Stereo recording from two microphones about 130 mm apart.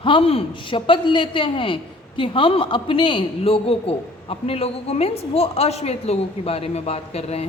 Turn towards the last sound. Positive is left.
turn(degrees=55)  # may be behind; listen again after turning